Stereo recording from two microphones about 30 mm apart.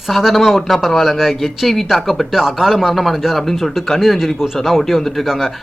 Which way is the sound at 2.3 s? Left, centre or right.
Centre.